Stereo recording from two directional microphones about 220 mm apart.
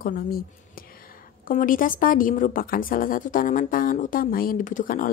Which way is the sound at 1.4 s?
40° left (ahead or behind).